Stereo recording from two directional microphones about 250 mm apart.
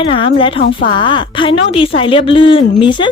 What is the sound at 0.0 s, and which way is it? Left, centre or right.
A woman's voice, left.